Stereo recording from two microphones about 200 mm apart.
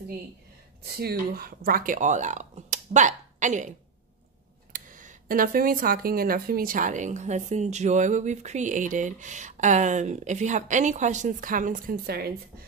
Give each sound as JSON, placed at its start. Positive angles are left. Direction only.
{"t": 0.8, "sound": "speech", "side_deg": -50}
{"t": 4.7, "sound": "speech", "side_deg": -45}